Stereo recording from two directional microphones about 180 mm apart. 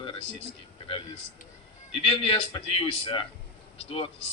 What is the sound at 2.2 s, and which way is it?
A man's voice, 30° left (ahead or behind).